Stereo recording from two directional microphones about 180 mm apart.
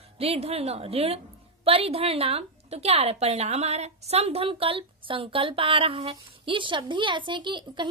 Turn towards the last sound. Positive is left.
turn(degrees=-25)  # may be behind; listen again after turning